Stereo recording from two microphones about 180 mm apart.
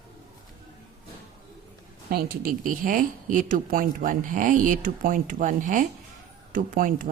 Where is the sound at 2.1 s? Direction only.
50° right (ahead or behind).